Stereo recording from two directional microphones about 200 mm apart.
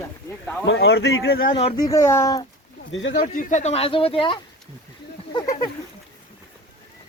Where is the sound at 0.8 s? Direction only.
55° left (ahead or behind).